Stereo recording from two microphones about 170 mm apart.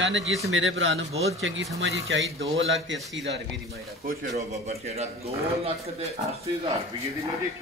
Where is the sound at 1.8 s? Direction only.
90° right.